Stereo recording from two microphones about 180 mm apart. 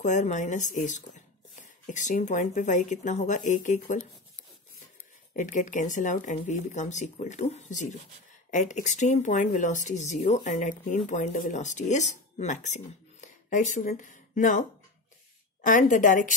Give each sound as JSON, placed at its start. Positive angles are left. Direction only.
{"t": 0.0, "sound": "speech", "side_deg": 40}
{"t": 5.3, "sound": "speech", "side_deg": 45}
{"t": 15.6, "sound": "speech", "side_deg": 45}